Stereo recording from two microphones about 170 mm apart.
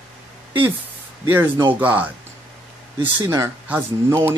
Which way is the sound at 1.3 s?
15° right (ahead or behind).